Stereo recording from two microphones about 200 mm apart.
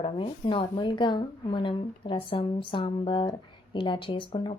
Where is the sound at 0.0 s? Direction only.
25° left (ahead or behind).